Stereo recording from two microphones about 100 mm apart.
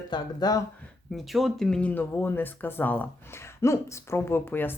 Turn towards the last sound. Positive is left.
turn(degrees=20)  # may be behind; listen again after turning